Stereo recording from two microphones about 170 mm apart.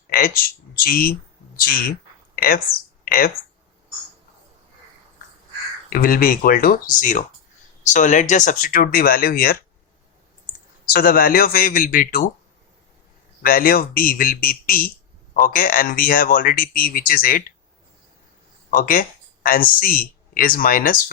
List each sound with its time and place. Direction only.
0.1 s speech: 60° left (ahead or behind)
5.9 s speech: 60° left (ahead or behind)
10.8 s speech: 60° left (ahead or behind)
13.4 s speech: 55° left (ahead or behind)
18.7 s speech: 55° left (ahead or behind)